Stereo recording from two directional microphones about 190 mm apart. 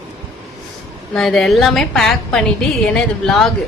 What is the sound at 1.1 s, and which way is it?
A woman's voice, centre (ahead or behind).